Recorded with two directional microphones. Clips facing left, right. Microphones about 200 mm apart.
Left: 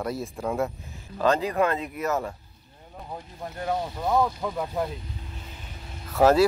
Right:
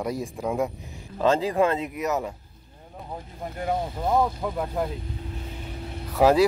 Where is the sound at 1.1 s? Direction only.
25° right (ahead or behind).